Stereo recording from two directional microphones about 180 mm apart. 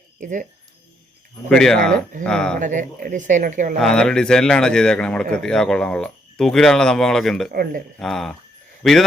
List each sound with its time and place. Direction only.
0.2 s speech: 45° right (ahead or behind)
1.5 s a man's voice: 5° left (ahead or behind)
2.6 s speech: 45° right (ahead or behind)
3.8 s a man's voice: 5° left (ahead or behind)
7.5 s speech: 55° right (ahead or behind)
7.9 s a man's voice: centre (ahead or behind)